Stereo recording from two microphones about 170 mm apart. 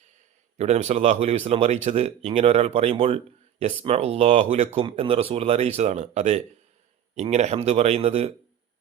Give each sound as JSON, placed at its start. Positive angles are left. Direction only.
{"t": 0.5, "sound": "speech", "side_deg": -40}
{"t": 4.8, "sound": "speech", "side_deg": -30}